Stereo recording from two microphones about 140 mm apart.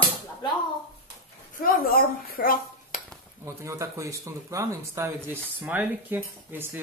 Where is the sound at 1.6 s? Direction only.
90° left.